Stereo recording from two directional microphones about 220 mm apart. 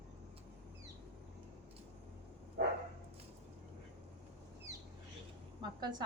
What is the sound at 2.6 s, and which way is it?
Dog, 40° right (ahead or behind).